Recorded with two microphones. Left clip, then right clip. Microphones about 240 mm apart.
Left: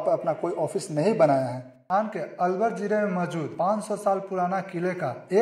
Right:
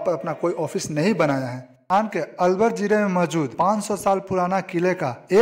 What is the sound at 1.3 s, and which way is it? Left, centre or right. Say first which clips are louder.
Speech: left 2 dB; right.